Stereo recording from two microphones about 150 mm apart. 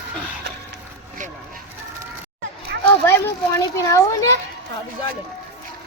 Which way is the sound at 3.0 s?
15° left (ahead or behind).